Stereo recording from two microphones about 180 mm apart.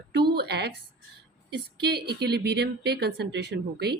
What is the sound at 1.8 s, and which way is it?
Speech, 65° right (ahead or behind).